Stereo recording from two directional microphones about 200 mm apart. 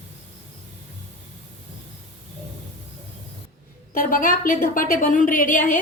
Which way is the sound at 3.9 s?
45° left (ahead or behind).